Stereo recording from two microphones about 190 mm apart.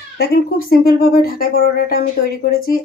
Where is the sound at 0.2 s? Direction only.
50° left (ahead or behind).